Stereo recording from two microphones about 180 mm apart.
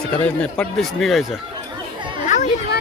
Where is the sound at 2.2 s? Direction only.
40° left (ahead or behind).